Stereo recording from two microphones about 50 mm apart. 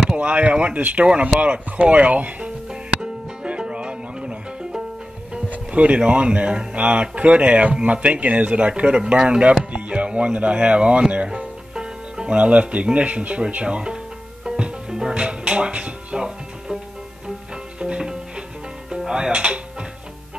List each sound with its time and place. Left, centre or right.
0.1 s speech: right
2.7 s music: centre
5.5 s speech: right
11.7 s speech: centre
14.4 s music: centre
17.7 s music: centre